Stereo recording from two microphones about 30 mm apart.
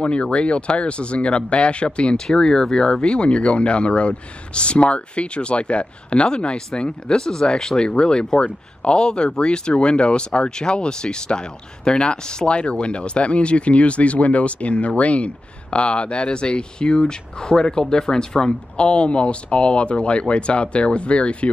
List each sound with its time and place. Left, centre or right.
0.0 s speech: left
2.1 s speech: left
18.5 s speech: left